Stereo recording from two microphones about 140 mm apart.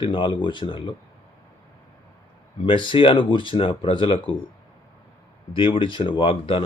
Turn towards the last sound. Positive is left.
turn(degrees=40)  # may be behind; listen again after turning